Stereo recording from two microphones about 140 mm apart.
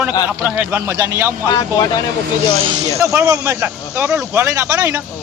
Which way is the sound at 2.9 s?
20° right (ahead or behind).